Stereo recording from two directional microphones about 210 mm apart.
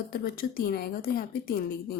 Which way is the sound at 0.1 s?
45° left (ahead or behind).